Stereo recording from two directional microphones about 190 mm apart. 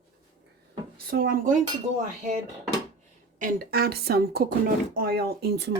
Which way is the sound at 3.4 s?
55° right (ahead or behind).